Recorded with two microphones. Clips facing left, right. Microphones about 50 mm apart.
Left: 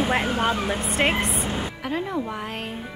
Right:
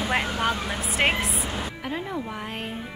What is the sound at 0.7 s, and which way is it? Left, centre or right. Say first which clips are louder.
A woman's voice: left 1 dB; centre.